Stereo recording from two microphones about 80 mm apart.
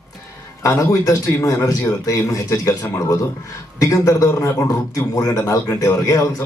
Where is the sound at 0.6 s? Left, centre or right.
Left.